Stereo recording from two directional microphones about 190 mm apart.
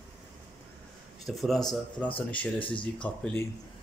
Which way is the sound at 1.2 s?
Centre (ahead or behind).